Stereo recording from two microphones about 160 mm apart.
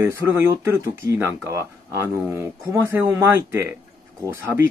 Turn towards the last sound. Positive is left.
turn(degrees=-15)  # may be behind; listen again after turning